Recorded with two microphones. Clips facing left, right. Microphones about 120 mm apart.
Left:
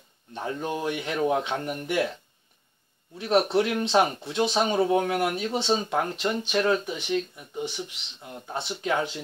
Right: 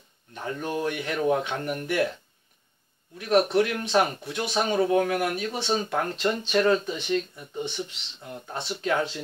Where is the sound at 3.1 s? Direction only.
25° left (ahead or behind).